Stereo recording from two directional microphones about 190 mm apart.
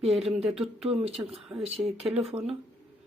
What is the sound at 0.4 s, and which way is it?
Speech, centre (ahead or behind).